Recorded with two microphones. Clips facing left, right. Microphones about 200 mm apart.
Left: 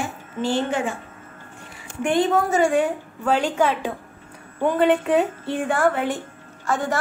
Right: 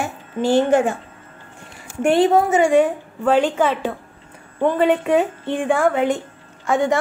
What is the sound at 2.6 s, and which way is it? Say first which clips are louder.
A woman's voice: right 4 dB; centre (ahead or behind).